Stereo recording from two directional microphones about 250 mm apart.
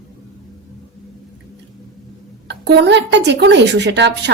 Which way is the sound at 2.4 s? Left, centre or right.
Right.